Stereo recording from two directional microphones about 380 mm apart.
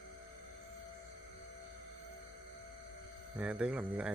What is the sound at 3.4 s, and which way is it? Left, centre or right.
Speech, centre.